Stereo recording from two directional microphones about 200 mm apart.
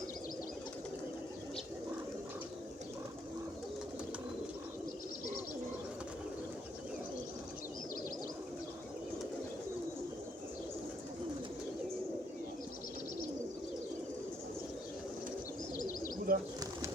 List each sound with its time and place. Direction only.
16.3 s bird: 45° right (ahead or behind)